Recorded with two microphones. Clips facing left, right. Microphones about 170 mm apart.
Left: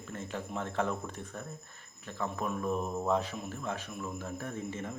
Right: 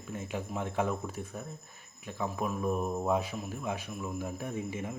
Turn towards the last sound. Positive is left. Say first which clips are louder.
# right 2 dB
turn(degrees=-10)  # may be behind; listen again after turning